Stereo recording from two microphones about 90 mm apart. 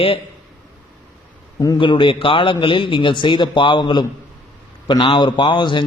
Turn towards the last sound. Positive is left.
turn(degrees=65)  # may be behind; listen again after turning